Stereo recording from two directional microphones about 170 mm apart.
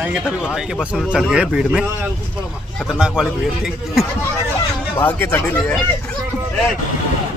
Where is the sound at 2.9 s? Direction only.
5° right (ahead or behind).